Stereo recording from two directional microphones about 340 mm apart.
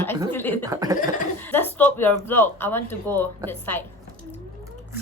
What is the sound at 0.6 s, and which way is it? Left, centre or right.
Speech, centre.